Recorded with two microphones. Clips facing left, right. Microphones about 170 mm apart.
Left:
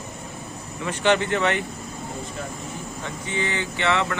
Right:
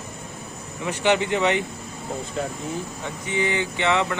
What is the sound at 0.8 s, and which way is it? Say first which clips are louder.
Speech: even; 15° right (ahead or behind).